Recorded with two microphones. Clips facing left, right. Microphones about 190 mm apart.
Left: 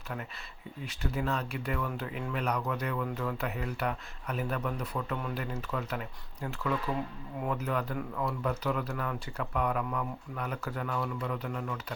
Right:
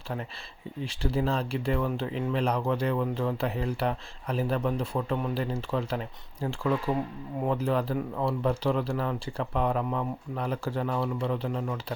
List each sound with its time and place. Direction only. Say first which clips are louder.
0.9 s speech: right 5 dB; 30° right (ahead or behind)